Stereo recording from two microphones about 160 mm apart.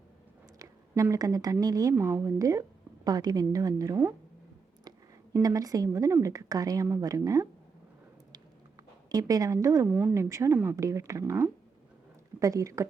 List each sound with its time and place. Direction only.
0.6 s a woman's voice: 20° right (ahead or behind)
9.1 s speech: 20° right (ahead or behind)